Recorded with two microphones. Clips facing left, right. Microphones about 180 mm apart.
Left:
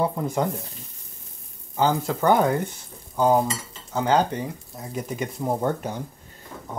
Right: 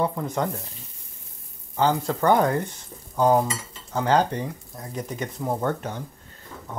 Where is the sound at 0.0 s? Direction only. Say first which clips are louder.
Left 1 dB; 10° left (ahead or behind).